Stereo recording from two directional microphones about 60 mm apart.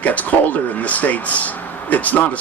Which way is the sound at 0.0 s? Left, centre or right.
Left.